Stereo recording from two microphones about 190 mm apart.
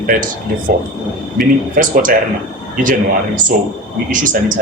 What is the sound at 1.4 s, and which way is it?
Speech, 45° right (ahead or behind).